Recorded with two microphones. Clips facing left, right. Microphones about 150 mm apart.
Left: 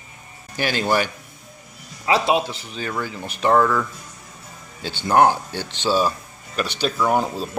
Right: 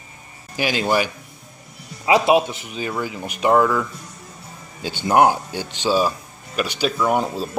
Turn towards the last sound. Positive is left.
turn(degrees=0)  # may be behind; listen again after turning